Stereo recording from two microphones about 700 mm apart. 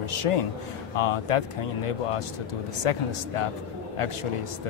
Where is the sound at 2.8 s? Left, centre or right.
Left.